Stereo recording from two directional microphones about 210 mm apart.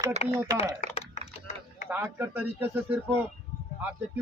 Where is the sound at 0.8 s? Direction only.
30° left (ahead or behind).